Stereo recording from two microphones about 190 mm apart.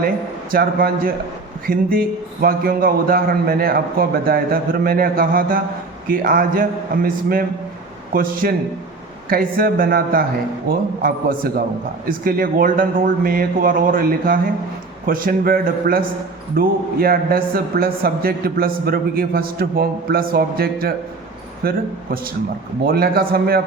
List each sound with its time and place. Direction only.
0.5 s a man's voice: 50° right (ahead or behind)
22.9 s a man's voice: 55° right (ahead or behind)